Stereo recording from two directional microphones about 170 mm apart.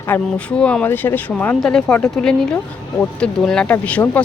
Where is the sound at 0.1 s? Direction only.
10° left (ahead or behind).